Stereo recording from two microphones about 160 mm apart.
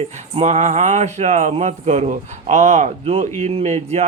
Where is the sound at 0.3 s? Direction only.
45° right (ahead or behind).